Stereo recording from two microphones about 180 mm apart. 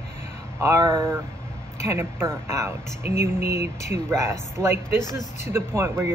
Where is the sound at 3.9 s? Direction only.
15° right (ahead or behind).